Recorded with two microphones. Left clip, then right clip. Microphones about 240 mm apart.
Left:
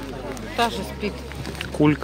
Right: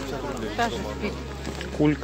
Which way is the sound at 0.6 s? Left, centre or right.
Left.